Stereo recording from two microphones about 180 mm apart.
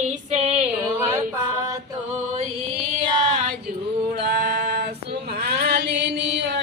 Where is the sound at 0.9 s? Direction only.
15° right (ahead or behind).